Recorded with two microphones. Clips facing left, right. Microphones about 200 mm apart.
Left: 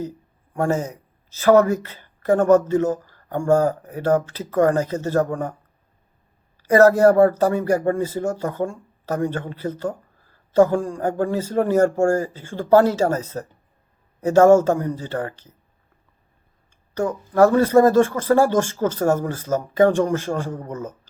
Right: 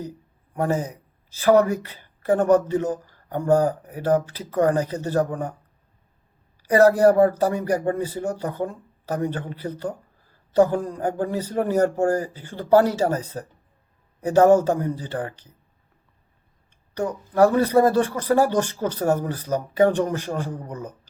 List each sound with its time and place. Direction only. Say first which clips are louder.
0.6 s speech: left 2 dB; 10° right (ahead or behind)
6.6 s speech: left 2 dB; 15° right (ahead or behind)
16.9 s speech: left 3 dB; 15° right (ahead or behind)